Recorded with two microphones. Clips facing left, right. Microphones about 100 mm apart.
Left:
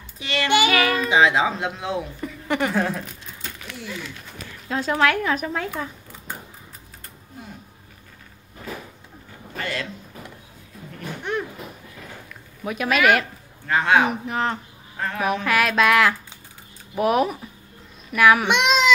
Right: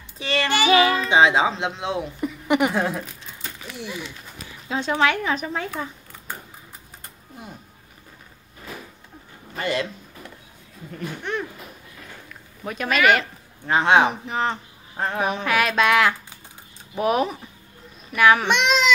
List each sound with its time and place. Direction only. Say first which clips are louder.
0.2 s child singing: right 2 dB; 30° right (ahead or behind)
0.7 s a child's voice: right 3 dB; 25° right (ahead or behind); by 5.7 s centre (ahead or behind)
9.6 s speech: right 4 dB; 20° right (ahead or behind)
12.6 s a sound: even; 5° left (ahead or behind)
13.7 s a man's voice: right 1 dB; 20° right (ahead or behind)
14.2 s a sound: even; centre (ahead or behind)
15.0 s a man's voice: right 2 dB; 30° right (ahead or behind)
15.4 s a sound: left 1 dB; centre (ahead or behind)
18.5 s child singing: left 1 dB; 15° left (ahead or behind)